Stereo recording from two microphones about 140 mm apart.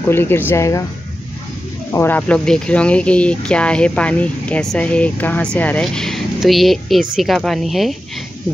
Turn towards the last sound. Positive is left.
turn(degrees=0)  # may be behind; listen again after turning